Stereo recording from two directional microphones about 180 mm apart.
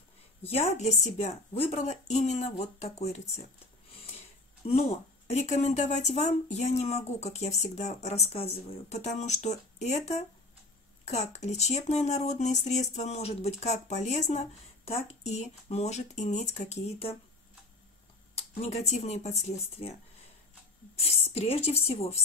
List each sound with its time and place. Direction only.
0.4 s speech: 35° left (ahead or behind)
5.3 s speech: 40° left (ahead or behind)
18.3 s speech: 35° left (ahead or behind)
21.0 s speech: 35° left (ahead or behind)